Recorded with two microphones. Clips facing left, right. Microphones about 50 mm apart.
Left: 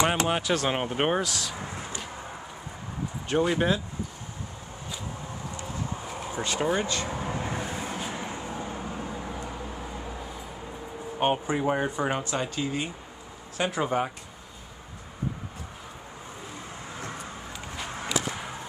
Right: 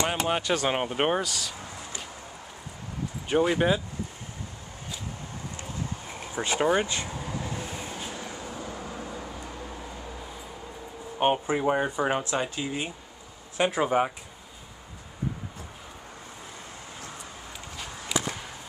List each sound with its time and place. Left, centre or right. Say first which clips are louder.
0.2 s speech: even; centre
1.6 s a sound: left 4 dB; left
3.3 s speech: right 1 dB; centre
6.4 s speech: right 3 dB; right
7.1 s vehicle: left 3 dB; left
11.1 s speech: right 1 dB; centre